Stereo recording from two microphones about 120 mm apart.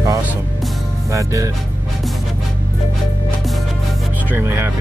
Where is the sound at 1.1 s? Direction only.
25° right (ahead or behind).